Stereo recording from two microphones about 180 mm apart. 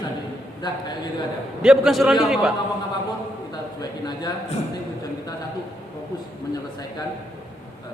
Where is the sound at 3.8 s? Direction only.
20° left (ahead or behind).